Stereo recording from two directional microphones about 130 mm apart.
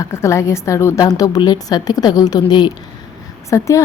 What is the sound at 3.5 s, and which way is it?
Speech, 25° left (ahead or behind).